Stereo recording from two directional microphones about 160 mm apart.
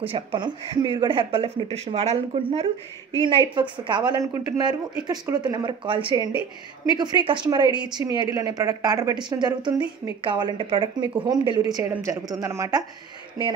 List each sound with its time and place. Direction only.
0.0 s a woman's voice: 35° right (ahead or behind); by 12.8 s 20° right (ahead or behind)